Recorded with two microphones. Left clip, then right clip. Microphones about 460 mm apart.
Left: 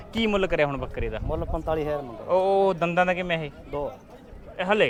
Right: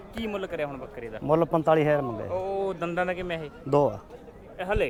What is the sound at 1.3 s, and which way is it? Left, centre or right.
Speech, right.